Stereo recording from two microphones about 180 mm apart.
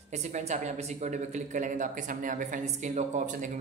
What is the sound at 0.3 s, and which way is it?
Speech, 40° right (ahead or behind).